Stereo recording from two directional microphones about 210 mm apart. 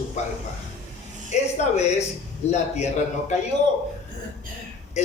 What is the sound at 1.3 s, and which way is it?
A man's voice, 30° left (ahead or behind).